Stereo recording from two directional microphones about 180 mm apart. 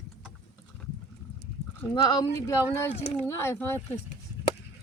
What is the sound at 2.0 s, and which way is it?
Speech, 20° left (ahead or behind).